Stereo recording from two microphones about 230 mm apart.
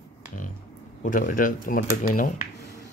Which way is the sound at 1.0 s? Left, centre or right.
Left.